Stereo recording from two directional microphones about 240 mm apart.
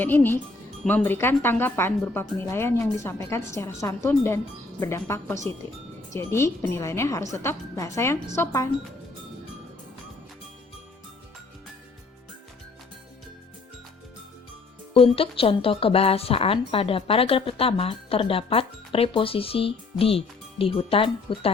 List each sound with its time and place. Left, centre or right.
0.0 s speech: centre
14.9 s speech: left